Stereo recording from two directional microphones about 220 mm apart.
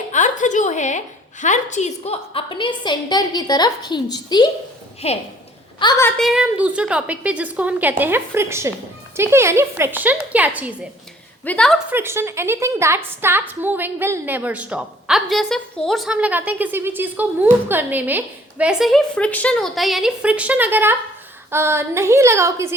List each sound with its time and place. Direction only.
0.1 s a woman's voice: 35° left (ahead or behind)
5.8 s a woman's voice: 15° left (ahead or behind); by 10.8 s 5° right (ahead or behind)
11.4 s a woman's voice: 5° left (ahead or behind)
11.9 s a woman's voice: 10° right (ahead or behind)